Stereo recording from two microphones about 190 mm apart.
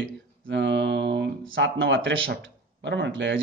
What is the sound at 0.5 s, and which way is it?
Speech, 70° right (ahead or behind).